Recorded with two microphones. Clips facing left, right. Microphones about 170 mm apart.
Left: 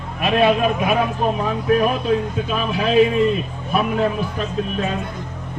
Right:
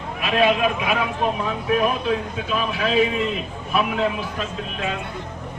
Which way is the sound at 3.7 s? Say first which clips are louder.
Left 2 dB; 40° left (ahead or behind).